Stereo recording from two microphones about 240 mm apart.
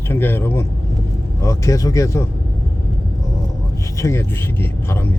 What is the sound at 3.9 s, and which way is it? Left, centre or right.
Speech, centre.